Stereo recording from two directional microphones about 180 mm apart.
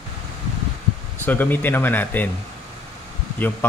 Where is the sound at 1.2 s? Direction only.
10° left (ahead or behind).